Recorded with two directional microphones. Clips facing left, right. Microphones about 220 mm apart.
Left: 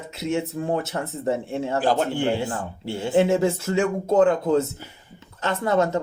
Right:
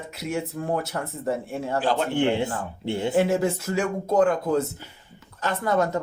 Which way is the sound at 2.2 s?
20° right (ahead or behind).